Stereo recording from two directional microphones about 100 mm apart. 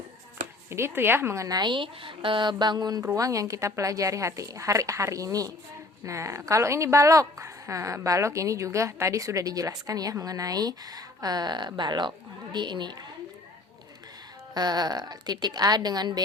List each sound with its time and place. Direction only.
0.7 s a woman's voice: 25° right (ahead or behind); by 13.0 s 50° right (ahead or behind)
14.5 s a woman's voice: 40° right (ahead or behind)